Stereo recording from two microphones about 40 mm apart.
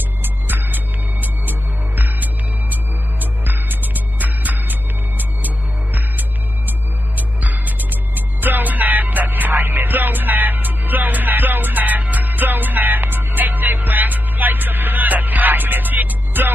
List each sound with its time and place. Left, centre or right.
0.2 s music: right
7.2 s music: right